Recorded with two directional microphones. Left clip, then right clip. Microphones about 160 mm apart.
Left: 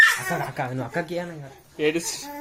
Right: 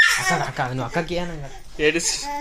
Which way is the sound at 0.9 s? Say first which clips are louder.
Right 3 dB; 10° right (ahead or behind).